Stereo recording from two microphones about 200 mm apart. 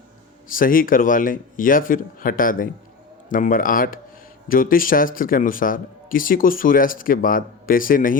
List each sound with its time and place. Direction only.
0.4 s a man's voice: 45° left (ahead or behind)